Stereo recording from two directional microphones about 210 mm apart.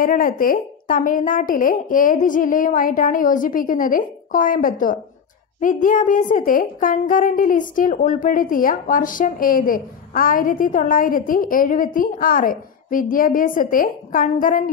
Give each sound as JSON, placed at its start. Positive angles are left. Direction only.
{"t": 0.0, "sound": "speech", "side_deg": 40}